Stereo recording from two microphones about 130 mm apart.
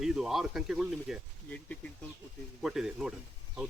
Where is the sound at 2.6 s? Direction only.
5° right (ahead or behind).